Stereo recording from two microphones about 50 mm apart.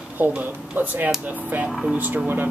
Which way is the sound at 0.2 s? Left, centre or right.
Right.